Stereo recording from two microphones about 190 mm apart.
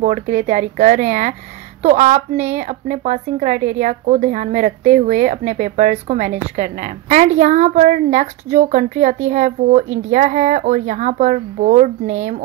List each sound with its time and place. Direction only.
0.0 s speech: 40° right (ahead or behind)